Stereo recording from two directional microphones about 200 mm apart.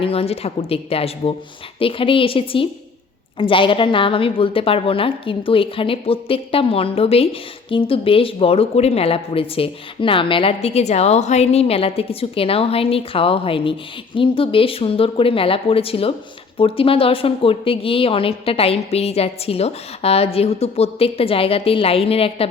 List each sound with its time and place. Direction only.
0.0 s a woman's voice: 30° left (ahead or behind)